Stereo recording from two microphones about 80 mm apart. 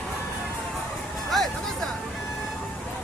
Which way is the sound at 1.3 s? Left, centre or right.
Centre.